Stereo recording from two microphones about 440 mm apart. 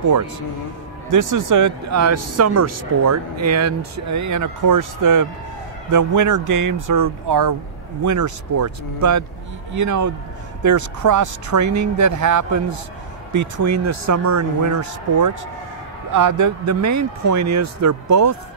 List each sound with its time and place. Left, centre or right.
1.1 s speech: right